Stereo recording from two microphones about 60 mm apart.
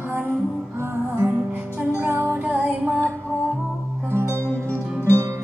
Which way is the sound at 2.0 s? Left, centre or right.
Right.